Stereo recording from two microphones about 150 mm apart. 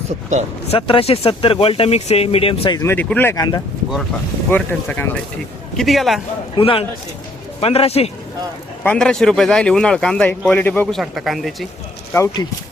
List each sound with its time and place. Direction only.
0.7 s speech: 35° left (ahead or behind)
2.8 s speech: 10° left (ahead or behind)
3.3 s speech: 25° left (ahead or behind)
4.5 s speech: 10° left (ahead or behind)
5.7 s speech: centre (ahead or behind)
6.6 s speech: 40° left (ahead or behind)
8.8 s speech: 10° left (ahead or behind)
10.9 s speech: centre (ahead or behind)
12.1 s speech: 20° left (ahead or behind)